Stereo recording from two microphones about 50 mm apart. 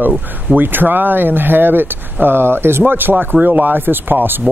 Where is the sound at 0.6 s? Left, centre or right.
Right.